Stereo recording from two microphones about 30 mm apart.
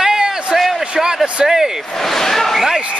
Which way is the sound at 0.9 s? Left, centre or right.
Right.